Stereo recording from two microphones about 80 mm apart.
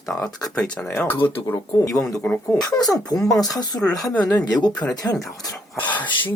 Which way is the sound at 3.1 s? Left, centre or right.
Left.